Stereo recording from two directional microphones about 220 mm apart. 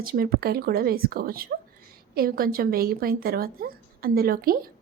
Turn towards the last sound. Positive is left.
turn(degrees=-40)  # may be behind; listen again after turning